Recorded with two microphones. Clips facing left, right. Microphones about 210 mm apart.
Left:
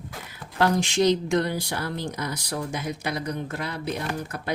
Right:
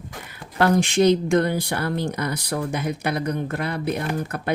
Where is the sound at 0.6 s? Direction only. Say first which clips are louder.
Right 4 dB; 55° right (ahead or behind).